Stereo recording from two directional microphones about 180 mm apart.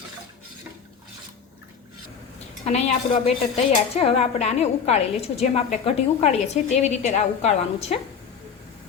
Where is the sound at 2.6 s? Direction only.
35° left (ahead or behind).